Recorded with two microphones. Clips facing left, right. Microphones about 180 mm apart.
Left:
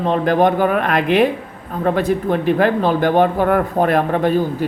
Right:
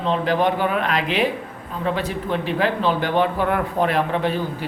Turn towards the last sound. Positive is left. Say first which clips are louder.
# left 5 dB
turn(degrees=45)  # may be behind; listen again after turning